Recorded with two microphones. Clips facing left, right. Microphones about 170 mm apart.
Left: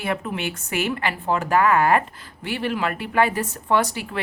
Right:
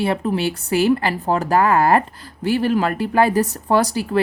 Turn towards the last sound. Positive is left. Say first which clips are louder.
# right 4 dB
turn(degrees=-35)  # may be behind; listen again after turning